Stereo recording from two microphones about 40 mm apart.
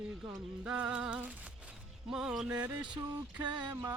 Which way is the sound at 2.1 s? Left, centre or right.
Centre.